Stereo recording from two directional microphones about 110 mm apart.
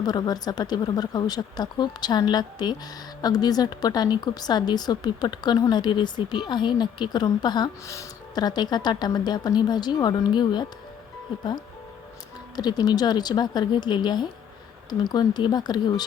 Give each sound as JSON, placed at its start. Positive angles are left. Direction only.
{"t": 0.0, "sound": "speech", "side_deg": 40}
{"t": 12.5, "sound": "speech", "side_deg": 40}